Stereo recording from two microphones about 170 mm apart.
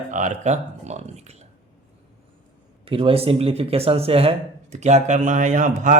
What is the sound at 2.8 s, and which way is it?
Speech, 30° right (ahead or behind).